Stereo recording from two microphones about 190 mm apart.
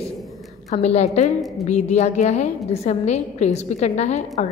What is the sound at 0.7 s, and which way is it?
A woman's voice, 35° left (ahead or behind).